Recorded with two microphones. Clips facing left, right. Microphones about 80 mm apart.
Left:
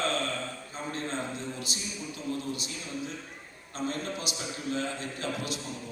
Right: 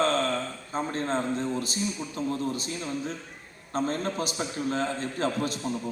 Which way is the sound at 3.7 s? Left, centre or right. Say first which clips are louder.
Right 6 dB; right.